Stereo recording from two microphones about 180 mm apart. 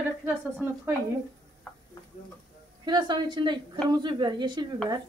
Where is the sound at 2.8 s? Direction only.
25° right (ahead or behind).